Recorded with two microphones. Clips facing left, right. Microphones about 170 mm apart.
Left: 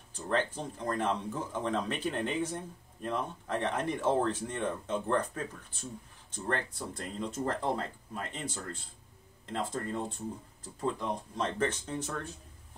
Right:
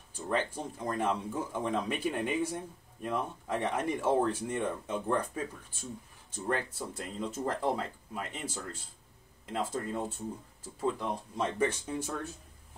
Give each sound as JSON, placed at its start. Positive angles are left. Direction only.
{"t": 0.1, "sound": "speech", "side_deg": -10}
{"t": 9.5, "sound": "speech", "side_deg": -5}